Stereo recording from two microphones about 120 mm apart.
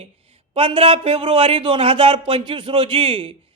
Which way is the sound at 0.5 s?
50° right (ahead or behind).